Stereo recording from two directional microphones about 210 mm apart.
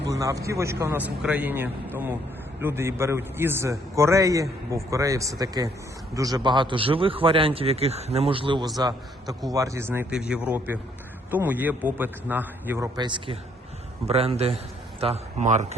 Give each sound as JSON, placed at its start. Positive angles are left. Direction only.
{"t": 0.1, "sound": "a man's voice", "side_deg": -15}